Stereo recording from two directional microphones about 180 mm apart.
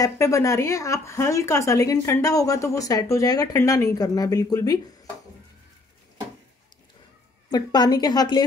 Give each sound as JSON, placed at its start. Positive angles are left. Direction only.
{"t": 0.0, "sound": "a woman's voice", "side_deg": 15}
{"t": 7.5, "sound": "a woman's voice", "side_deg": 20}